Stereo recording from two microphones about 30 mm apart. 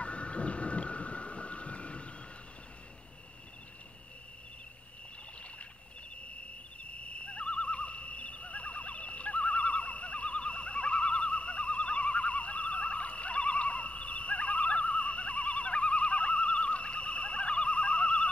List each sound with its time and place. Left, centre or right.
0.0 s thunder: left
6.8 s neigh: left